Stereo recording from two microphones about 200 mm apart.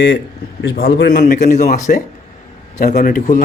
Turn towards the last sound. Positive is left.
turn(degrees=40)  # may be behind; listen again after turning